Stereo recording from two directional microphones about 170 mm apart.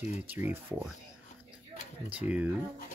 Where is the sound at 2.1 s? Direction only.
10° right (ahead or behind).